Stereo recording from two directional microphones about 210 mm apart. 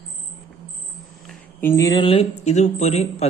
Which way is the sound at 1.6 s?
15° left (ahead or behind).